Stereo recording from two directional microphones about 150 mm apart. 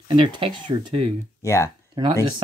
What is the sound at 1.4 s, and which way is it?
Speech, 20° left (ahead or behind).